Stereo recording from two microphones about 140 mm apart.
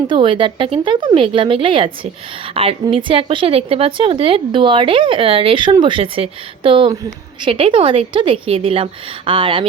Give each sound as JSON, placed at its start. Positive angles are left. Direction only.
{"t": 0.1, "sound": "speech", "side_deg": -35}